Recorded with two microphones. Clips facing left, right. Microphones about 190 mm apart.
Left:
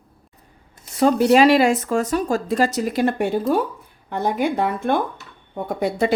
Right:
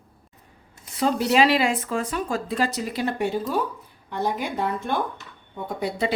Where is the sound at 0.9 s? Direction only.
50° left (ahead or behind).